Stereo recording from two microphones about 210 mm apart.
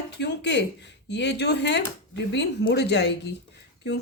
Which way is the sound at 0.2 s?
55° left (ahead or behind).